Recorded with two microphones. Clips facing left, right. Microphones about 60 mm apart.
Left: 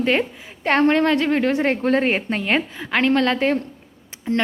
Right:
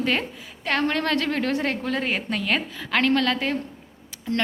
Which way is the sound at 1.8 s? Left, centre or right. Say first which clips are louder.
Left 7 dB; left.